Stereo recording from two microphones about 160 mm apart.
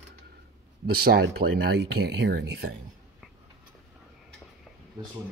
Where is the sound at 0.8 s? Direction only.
75° right (ahead or behind).